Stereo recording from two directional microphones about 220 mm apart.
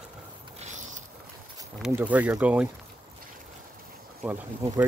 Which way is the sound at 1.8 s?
5° right (ahead or behind).